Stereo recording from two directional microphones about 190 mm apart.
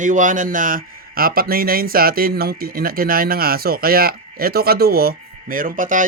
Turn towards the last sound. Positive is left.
turn(degrees=-45)  # may be behind; listen again after turning